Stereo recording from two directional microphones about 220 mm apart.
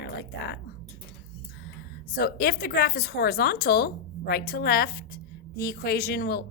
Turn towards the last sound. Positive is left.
turn(degrees=45)  # may be behind; listen again after turning